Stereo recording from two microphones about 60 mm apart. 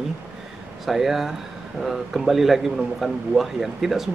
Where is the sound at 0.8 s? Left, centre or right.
Centre.